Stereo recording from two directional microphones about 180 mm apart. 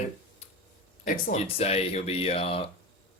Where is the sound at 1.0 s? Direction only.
40° left (ahead or behind).